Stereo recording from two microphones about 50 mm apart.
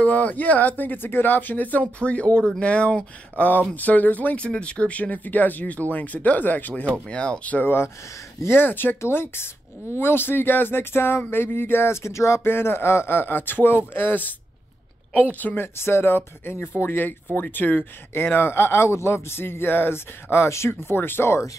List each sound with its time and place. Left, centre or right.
0.0 s speech: left
4.4 s speech: left
7.1 s speech: centre
7.6 s speech: left
8.6 s speech: left
9.0 s speech: left
12.4 s speech: left
15.5 s speech: left